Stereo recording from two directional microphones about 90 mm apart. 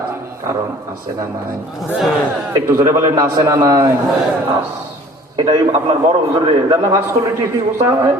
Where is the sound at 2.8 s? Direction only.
30° right (ahead or behind).